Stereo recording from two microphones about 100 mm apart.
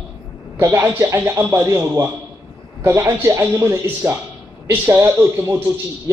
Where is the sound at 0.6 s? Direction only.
30° right (ahead or behind).